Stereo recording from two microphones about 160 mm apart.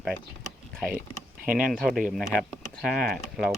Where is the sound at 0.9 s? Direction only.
60° right (ahead or behind).